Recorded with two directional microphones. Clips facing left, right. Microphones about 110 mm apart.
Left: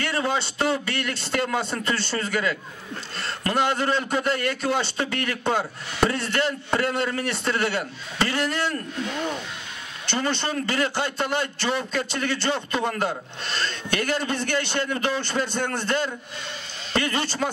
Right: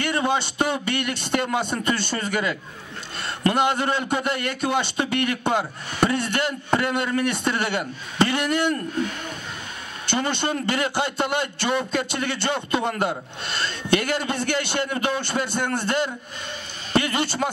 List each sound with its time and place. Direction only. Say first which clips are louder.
0.1 s a man's voice: right 2 dB; 20° right (ahead or behind)
10.0 s a man's voice: right 2 dB; 20° right (ahead or behind)